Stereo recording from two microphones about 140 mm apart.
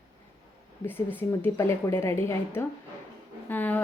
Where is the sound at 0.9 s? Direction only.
15° left (ahead or behind).